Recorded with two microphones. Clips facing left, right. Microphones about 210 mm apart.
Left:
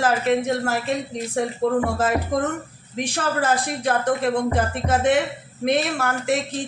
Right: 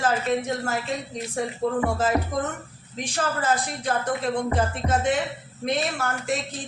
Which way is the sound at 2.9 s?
65° left (ahead or behind).